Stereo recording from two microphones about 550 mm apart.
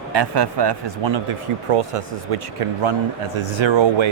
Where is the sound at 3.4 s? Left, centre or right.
Right.